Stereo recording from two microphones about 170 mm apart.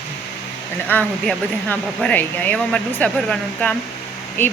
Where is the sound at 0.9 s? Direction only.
10° left (ahead or behind).